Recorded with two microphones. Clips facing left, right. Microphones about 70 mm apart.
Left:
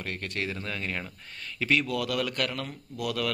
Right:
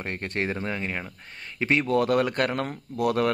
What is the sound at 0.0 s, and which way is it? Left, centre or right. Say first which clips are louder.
Speech: right 4 dB; right.